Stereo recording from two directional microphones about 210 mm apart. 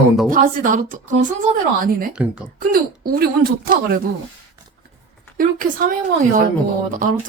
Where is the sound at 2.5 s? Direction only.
45° right (ahead or behind).